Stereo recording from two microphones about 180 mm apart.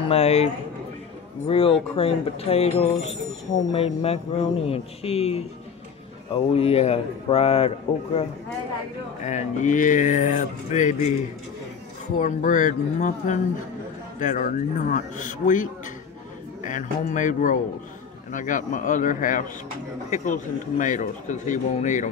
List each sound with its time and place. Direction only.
0.1 s a man's voice: 35° left (ahead or behind)
1.5 s a man's voice: 30° left (ahead or behind)
9.2 s speech: 40° left (ahead or behind)
12.2 s speech: 45° left (ahead or behind)